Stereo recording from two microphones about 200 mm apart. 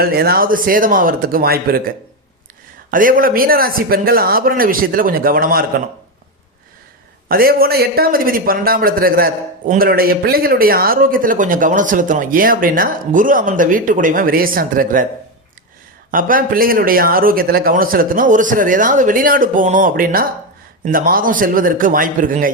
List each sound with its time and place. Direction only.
0.0 s a man's voice: 50° right (ahead or behind)
2.9 s a man's voice: 45° right (ahead or behind)
7.3 s a man's voice: 50° right (ahead or behind)
16.1 s a man's voice: 45° right (ahead or behind)